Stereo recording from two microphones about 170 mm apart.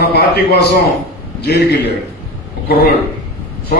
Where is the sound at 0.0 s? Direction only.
70° left (ahead or behind).